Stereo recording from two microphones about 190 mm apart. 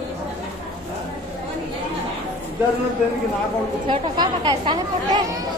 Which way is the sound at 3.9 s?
25° right (ahead or behind).